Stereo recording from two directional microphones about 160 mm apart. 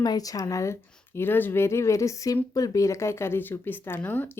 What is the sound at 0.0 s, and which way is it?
Speech, 25° left (ahead or behind).